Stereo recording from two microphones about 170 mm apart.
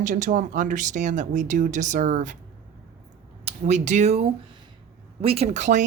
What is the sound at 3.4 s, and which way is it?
Speech, 45° right (ahead or behind).